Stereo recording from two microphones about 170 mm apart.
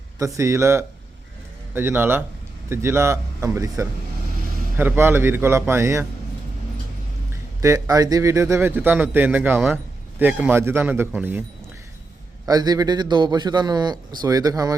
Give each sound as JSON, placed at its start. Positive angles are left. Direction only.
{"t": 0.2, "sound": "a man's voice", "side_deg": -20}
{"t": 7.6, "sound": "a man's voice", "side_deg": -20}
{"t": 12.5, "sound": "a man's voice", "side_deg": -20}